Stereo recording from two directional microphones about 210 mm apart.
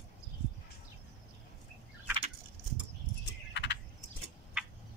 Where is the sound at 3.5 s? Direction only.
55° left (ahead or behind).